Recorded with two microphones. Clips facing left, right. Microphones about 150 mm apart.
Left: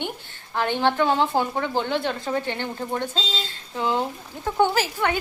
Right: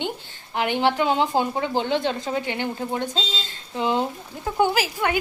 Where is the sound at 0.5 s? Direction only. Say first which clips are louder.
Right 1 dB; 15° right (ahead or behind).